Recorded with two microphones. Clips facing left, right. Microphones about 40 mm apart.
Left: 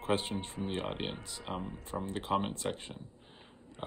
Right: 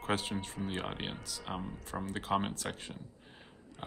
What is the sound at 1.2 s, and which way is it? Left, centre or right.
Speech, left.